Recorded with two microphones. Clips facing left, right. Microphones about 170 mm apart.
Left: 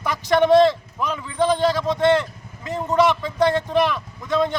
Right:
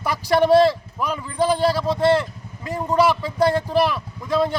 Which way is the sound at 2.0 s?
10° right (ahead or behind).